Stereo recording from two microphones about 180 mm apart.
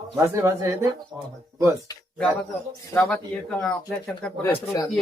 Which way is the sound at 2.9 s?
5° left (ahead or behind).